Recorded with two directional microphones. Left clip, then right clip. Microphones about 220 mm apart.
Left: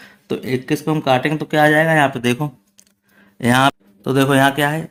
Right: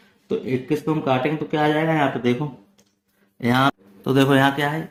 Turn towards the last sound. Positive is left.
turn(degrees=25)  # may be behind; listen again after turning